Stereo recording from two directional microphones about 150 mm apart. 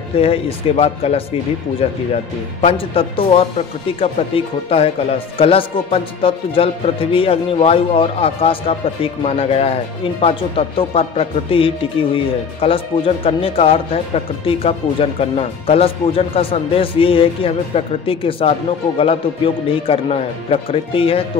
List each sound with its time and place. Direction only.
0.2 s speech: 40° left (ahead or behind)
10.8 s speech: 40° left (ahead or behind)